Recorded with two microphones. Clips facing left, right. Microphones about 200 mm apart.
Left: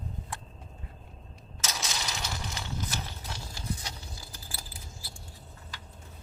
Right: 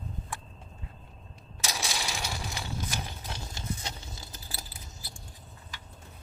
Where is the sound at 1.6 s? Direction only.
10° right (ahead or behind).